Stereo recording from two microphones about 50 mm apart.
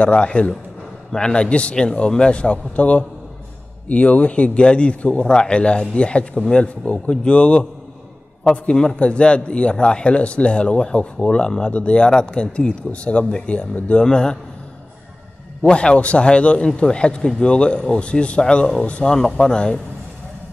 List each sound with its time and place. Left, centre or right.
0.0 s speech: left
8.7 s a man's voice: centre
15.7 s speech: left